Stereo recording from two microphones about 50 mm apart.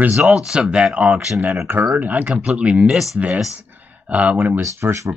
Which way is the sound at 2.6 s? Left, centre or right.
Centre.